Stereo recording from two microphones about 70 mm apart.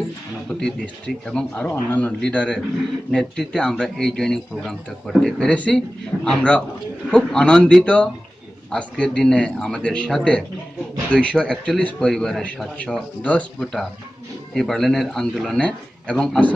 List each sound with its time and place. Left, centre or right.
0.5 s speech: centre
1.7 s a man's voice: left
2.2 s speech: centre
5.5 s speech: centre
13.2 s a man's voice: centre
13.6 s speech: centre
15.6 s speech: centre